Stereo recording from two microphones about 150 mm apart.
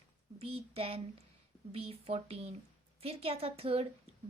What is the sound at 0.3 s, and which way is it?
A woman's voice, 40° right (ahead or behind).